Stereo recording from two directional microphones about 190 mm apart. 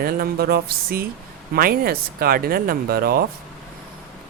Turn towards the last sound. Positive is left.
turn(degrees=-55)  # may be behind; listen again after turning